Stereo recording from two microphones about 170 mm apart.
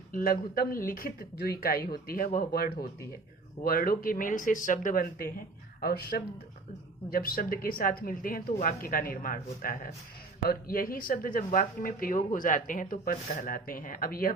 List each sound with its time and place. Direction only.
0.1 s speech: 55° left (ahead or behind)